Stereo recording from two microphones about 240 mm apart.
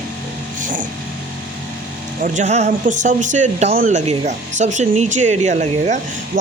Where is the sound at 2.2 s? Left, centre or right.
Right.